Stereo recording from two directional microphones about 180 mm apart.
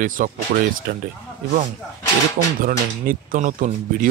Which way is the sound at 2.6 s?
50° right (ahead or behind).